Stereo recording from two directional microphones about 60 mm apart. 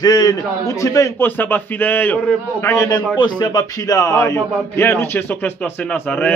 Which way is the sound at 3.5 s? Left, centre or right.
Left.